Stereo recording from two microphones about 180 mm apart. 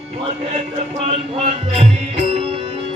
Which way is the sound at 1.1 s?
35° right (ahead or behind).